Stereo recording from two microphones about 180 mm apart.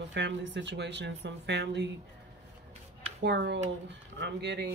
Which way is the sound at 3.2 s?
70° right (ahead or behind).